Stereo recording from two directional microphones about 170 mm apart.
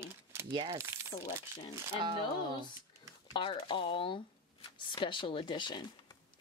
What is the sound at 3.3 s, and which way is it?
Speech, 30° left (ahead or behind).